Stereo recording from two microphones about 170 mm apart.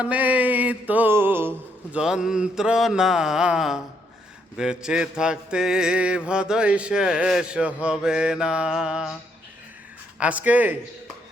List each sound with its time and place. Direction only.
0.0 s music: 10° right (ahead or behind)
1.9 s mantra: 5° right (ahead or behind)
10.2 s music: 10° right (ahead or behind)